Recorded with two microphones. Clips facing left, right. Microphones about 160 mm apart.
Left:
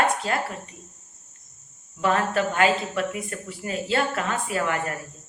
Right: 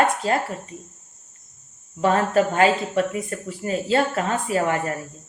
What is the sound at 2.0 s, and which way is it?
Speech, 35° right (ahead or behind).